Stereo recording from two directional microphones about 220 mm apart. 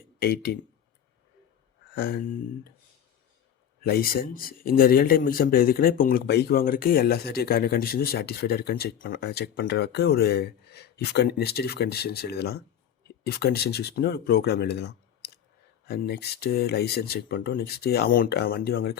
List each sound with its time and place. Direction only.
0.2 s speech: 45° left (ahead or behind)
2.0 s speech: 45° left (ahead or behind)
3.8 s speech: 45° left (ahead or behind)